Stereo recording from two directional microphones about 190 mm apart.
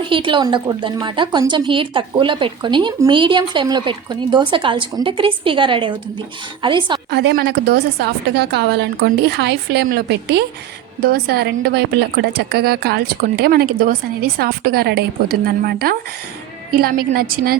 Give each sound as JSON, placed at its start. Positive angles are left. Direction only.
{"t": 0.0, "sound": "a woman's voice", "side_deg": -25}
{"t": 7.1, "sound": "a woman's voice", "side_deg": -60}